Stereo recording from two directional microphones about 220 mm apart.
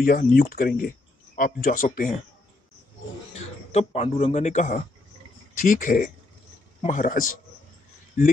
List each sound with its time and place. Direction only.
0.0 s speech: 40° left (ahead or behind)
3.7 s a man's voice: 30° left (ahead or behind)